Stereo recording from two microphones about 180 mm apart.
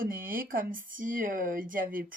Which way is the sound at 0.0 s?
50° right (ahead or behind).